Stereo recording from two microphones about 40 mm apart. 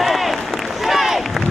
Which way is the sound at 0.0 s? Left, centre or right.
Centre.